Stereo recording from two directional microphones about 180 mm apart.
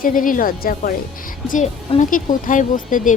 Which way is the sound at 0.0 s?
50° left (ahead or behind).